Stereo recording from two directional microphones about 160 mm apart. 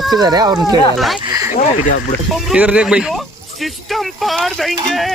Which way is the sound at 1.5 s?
55° left (ahead or behind).